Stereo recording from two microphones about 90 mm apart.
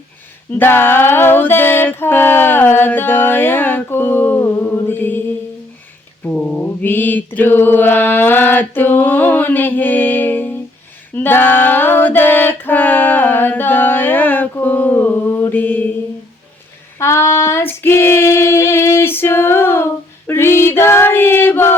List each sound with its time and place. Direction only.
0.6 s a sound: 25° left (ahead or behind)
6.2 s mantra: 15° left (ahead or behind)
11.1 s female singing: 25° left (ahead or behind)
17.0 s female singing: 30° left (ahead or behind)